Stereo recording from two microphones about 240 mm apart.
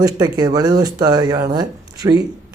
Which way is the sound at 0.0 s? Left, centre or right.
Centre.